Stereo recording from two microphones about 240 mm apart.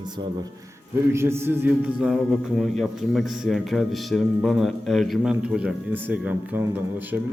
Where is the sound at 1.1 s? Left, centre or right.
Centre.